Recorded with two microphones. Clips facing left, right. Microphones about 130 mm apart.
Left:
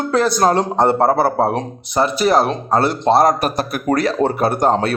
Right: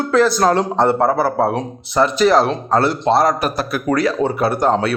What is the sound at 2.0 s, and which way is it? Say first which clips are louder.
Speech: right 1 dB; 15° left (ahead or behind).